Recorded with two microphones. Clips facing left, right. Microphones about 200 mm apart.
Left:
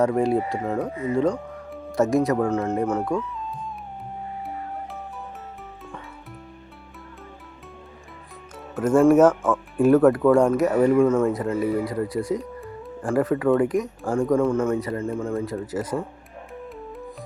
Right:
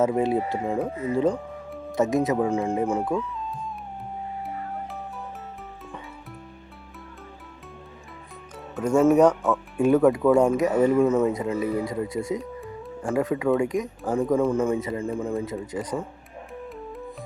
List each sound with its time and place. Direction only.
0.0 s speech: centre (ahead or behind)
8.7 s music: 5° left (ahead or behind)
9.0 s speech: 5° left (ahead or behind)